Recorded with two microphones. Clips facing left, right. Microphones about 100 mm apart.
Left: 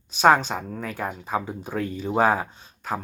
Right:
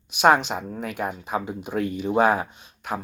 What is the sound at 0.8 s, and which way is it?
Speech, 40° left (ahead or behind).